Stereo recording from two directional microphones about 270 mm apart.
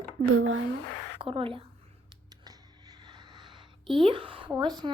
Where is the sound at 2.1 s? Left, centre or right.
Centre.